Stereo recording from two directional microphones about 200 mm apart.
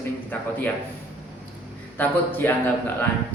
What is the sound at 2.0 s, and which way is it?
Speech, 10° left (ahead or behind).